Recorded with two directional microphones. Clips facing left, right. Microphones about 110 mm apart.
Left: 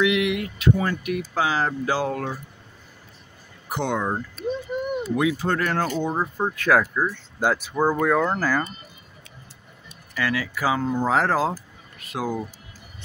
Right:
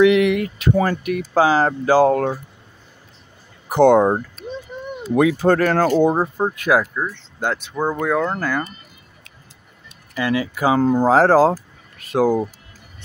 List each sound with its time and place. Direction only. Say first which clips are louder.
0.0 s a sound: right 8 dB; 45° right (ahead or behind)
0.8 s speech: right 4 dB; 45° right (ahead or behind)
3.6 s speech: right 13 dB; 45° right (ahead or behind)
4.7 s a sound: left 6 dB; 10° left (ahead or behind)
5.1 s speech: right 9 dB; 50° right (ahead or behind)
6.3 s speech: right 2 dB; 15° right (ahead or behind)
6.8 s speech: even; 5° left (ahead or behind)
10.1 s speech: right 5 dB; 20° right (ahead or behind)
10.8 s speech: right 10 dB; 35° right (ahead or behind)